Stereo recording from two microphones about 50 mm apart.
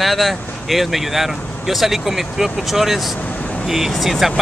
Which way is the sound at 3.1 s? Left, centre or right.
Left.